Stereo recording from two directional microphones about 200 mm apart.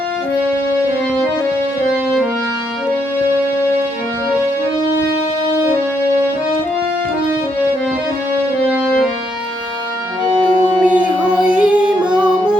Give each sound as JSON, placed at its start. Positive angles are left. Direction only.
{"t": 8.7, "sound": "music", "side_deg": 0}
{"t": 10.4, "sound": "music", "side_deg": -25}
{"t": 10.8, "sound": "music", "side_deg": -5}
{"t": 12.0, "sound": "music", "side_deg": -20}